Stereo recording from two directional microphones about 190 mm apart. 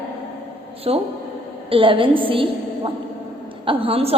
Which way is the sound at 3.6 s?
30° right (ahead or behind).